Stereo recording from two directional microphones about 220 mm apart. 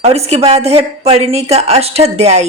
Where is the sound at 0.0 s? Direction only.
30° right (ahead or behind).